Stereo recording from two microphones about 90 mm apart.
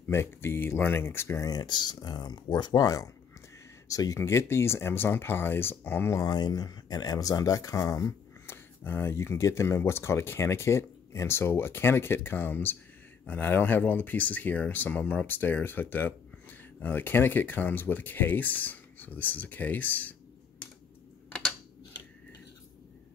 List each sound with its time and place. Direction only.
0.1 s speech: 30° left (ahead or behind)
1.5 s speech: 50° left (ahead or behind); by 6.2 s 25° left (ahead or behind)
6.2 s speech: 50° left (ahead or behind)
8.8 s speech: 25° left (ahead or behind)